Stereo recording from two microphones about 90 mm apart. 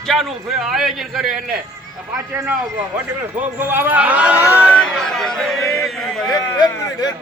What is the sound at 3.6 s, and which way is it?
Speech, 25° right (ahead or behind).